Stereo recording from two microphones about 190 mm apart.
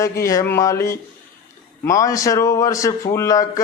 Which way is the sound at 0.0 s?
15° left (ahead or behind).